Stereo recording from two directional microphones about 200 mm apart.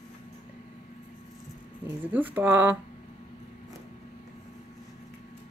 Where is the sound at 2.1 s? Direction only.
10° right (ahead or behind).